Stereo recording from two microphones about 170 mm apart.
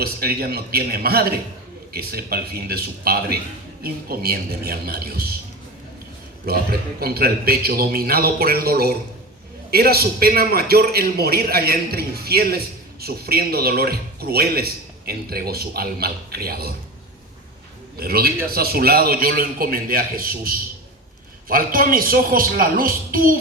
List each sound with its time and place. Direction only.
0.0 s a man's voice: 65° right (ahead or behind)
6.4 s a man's voice: 65° right (ahead or behind)
17.9 s a man's voice: 65° right (ahead or behind)